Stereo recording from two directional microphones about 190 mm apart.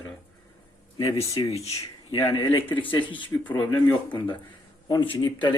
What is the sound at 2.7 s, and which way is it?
Speech, 10° left (ahead or behind).